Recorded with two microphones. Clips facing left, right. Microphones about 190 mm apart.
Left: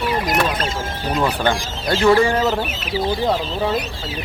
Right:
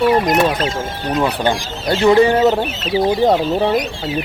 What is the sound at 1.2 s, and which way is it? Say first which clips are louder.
Speech: right 2 dB; 15° right (ahead or behind).